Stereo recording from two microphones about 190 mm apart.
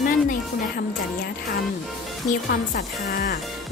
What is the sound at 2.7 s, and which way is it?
Speech, 50° left (ahead or behind).